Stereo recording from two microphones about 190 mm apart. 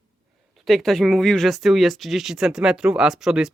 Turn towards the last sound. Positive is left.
turn(degrees=-5)  # may be behind; listen again after turning